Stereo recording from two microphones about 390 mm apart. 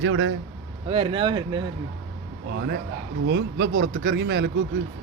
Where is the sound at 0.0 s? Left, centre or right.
Right.